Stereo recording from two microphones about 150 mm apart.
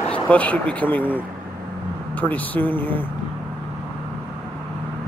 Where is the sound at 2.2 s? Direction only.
10° left (ahead or behind).